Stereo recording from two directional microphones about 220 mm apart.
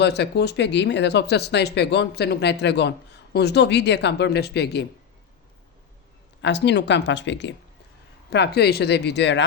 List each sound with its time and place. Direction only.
0.0 s speech: 50° left (ahead or behind)
6.4 s speech: 50° left (ahead or behind)